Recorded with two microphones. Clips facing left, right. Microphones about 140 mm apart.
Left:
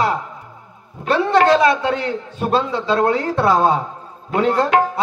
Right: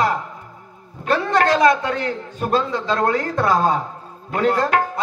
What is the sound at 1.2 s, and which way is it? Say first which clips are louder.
Tabla: left 2 dB; 45° right (ahead or behind).